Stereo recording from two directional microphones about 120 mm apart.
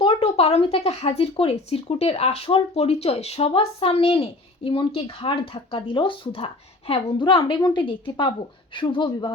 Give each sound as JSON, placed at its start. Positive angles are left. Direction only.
{"t": 0.0, "sound": "speech", "side_deg": 55}